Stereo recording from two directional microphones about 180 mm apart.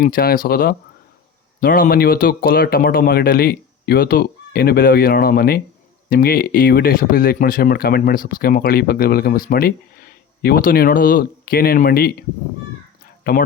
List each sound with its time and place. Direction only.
0.0 s speech: 55° left (ahead or behind)
13.2 s speech: 55° left (ahead or behind)